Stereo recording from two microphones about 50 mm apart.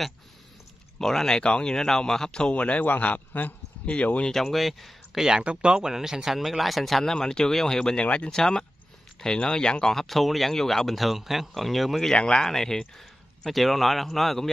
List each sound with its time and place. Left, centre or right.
0.9 s speech: centre
2.5 s a man's voice: left
4.3 s speech: centre
5.4 s speech: right; by 9.9 s centre
9.9 s speech: centre
12.2 s speech: centre